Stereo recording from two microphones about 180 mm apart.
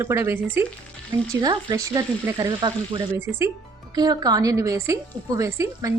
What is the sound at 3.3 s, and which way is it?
Speech, centre (ahead or behind).